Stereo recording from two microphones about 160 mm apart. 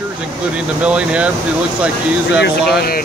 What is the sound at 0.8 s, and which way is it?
Speech, 5° right (ahead or behind).